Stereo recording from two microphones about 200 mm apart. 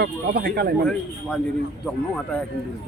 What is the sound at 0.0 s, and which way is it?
Speech, 50° right (ahead or behind).